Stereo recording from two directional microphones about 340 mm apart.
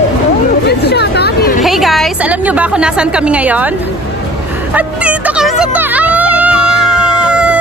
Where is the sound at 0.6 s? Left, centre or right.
Left.